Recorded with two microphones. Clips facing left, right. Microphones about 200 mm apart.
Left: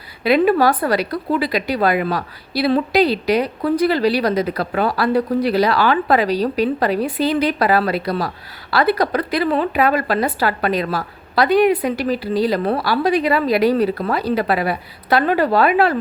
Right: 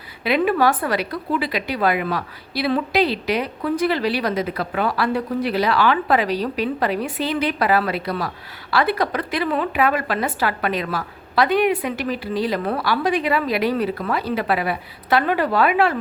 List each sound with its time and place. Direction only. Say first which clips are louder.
0.3 s a woman's voice: left 4 dB; 35° left (ahead or behind)